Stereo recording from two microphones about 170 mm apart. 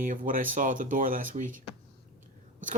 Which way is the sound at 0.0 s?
50° right (ahead or behind).